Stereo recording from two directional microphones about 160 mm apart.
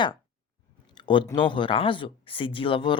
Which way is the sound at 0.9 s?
30° left (ahead or behind).